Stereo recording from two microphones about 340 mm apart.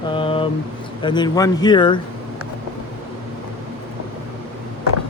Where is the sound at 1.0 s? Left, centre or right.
Centre.